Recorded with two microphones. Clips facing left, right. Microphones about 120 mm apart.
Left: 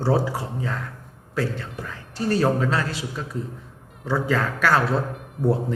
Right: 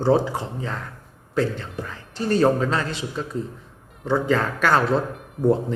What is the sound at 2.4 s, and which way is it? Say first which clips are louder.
Speech: right 4 dB; 20° right (ahead or behind).